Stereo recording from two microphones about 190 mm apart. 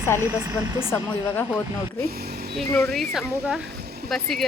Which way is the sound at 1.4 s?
10° left (ahead or behind).